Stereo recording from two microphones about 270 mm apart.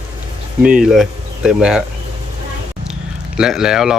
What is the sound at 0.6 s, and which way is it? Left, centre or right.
Speech, centre.